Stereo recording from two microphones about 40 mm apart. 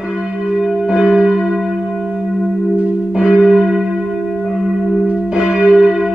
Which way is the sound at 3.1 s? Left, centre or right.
Centre.